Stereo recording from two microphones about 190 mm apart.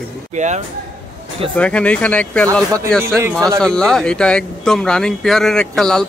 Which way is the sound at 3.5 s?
5° left (ahead or behind).